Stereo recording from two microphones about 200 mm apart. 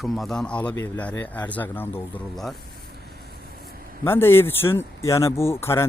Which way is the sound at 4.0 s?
10° left (ahead or behind).